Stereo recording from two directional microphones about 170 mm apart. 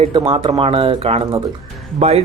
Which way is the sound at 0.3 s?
30° right (ahead or behind).